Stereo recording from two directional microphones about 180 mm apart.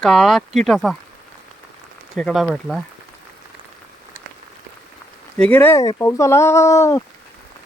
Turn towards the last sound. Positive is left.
turn(degrees=15)  # may be behind; listen again after turning